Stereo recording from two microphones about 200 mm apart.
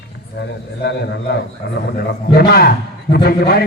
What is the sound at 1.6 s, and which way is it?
A man's voice, 60° left (ahead or behind).